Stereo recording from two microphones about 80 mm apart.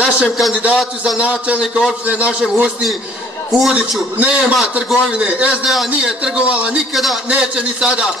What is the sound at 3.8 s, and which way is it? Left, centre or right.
Speech, centre.